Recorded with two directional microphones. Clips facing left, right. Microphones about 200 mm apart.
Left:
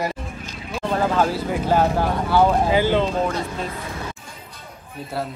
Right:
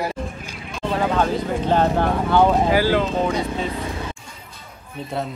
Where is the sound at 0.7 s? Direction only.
Centre (ahead or behind).